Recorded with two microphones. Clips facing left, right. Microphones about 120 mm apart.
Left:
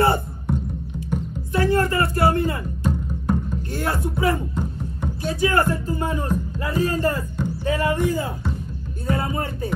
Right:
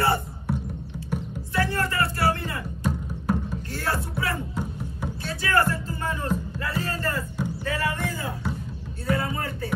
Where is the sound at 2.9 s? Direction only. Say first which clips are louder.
Left 3 dB; 5° right (ahead or behind).